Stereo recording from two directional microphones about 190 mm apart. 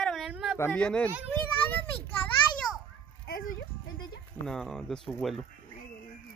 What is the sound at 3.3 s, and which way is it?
Music, 55° left (ahead or behind).